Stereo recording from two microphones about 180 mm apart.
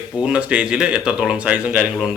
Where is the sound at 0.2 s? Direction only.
5° right (ahead or behind).